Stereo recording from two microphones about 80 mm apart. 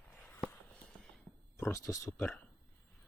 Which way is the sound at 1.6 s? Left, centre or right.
Left.